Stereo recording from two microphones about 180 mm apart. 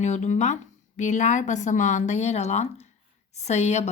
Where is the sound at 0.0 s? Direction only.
40° left (ahead or behind).